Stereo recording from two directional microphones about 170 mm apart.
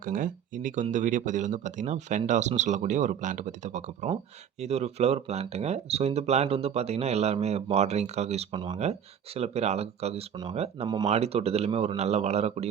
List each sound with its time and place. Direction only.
0.0 s speech: 55° right (ahead or behind)
8.5 s speech: 25° right (ahead or behind)
8.8 s speech: 40° right (ahead or behind)
10.8 s speech: 25° right (ahead or behind)
11.1 s speech: 35° right (ahead or behind)